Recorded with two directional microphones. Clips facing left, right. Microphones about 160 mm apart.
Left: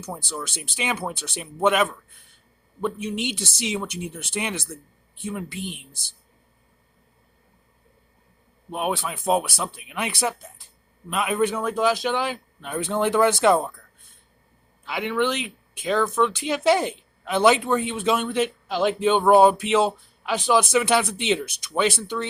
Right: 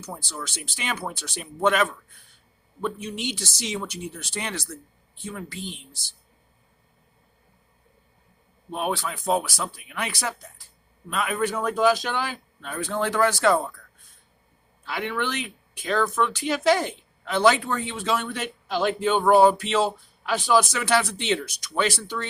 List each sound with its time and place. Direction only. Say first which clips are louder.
0.1 s speech: left 3 dB; 20° left (ahead or behind)
8.7 s speech: left 1 dB; 15° left (ahead or behind)
14.8 s speech: left 4 dB; 15° left (ahead or behind)